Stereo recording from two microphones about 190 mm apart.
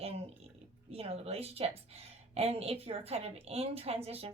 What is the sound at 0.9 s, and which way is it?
A woman's voice, 30° right (ahead or behind).